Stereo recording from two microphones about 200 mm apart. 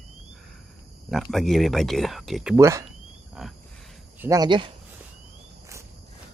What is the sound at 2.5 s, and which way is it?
Speech, 15° right (ahead or behind).